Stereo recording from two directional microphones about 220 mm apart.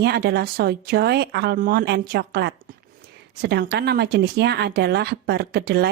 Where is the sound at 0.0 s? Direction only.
45° right (ahead or behind).